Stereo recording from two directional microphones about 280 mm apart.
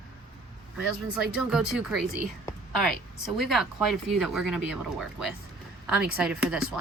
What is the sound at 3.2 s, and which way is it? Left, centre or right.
Speech, centre.